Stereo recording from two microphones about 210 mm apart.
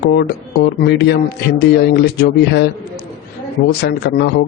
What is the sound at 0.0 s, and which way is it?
A man's voice, 50° left (ahead or behind).